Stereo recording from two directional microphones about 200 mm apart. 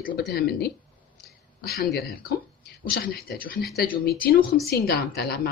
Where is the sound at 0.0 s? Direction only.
50° left (ahead or behind).